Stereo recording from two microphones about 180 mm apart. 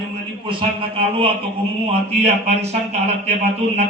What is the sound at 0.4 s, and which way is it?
Mantra, 30° right (ahead or behind).